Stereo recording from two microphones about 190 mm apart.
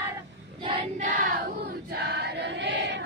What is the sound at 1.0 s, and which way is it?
Child singing, 40° right (ahead or behind).